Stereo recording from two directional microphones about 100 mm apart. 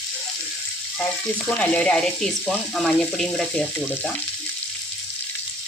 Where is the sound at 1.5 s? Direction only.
15° left (ahead or behind).